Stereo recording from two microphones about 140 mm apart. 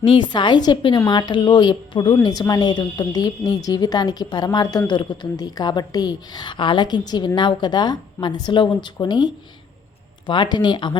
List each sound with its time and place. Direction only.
0.0 s a woman's voice: 35° left (ahead or behind)